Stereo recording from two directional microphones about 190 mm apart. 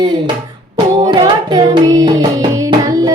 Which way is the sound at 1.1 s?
20° right (ahead or behind).